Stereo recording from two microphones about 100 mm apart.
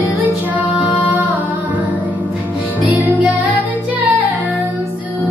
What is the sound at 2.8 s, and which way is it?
Music, 15° right (ahead or behind).